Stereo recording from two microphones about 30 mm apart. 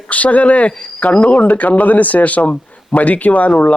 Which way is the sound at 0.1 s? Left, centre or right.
Left.